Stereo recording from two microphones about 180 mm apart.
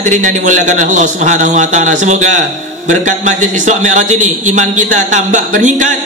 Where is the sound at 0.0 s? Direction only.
45° right (ahead or behind).